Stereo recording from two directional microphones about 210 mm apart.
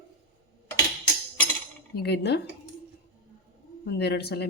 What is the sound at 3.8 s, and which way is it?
Speech, 50° left (ahead or behind).